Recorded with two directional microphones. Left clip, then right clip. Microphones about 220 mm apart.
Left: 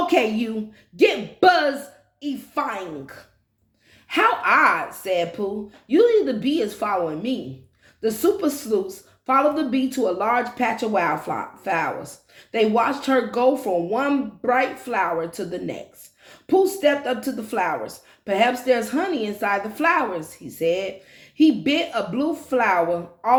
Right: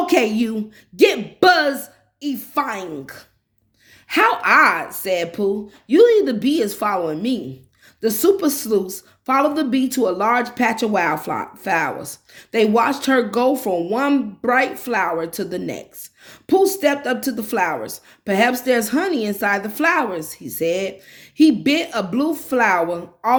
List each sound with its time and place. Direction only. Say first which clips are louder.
0.0 s a woman's voice: right 2 dB; 50° right (ahead or behind)